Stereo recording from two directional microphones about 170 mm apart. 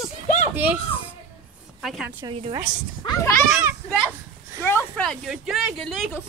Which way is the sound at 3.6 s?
10° right (ahead or behind).